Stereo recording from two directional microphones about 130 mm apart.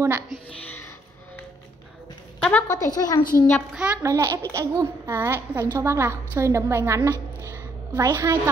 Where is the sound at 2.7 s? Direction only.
30° left (ahead or behind).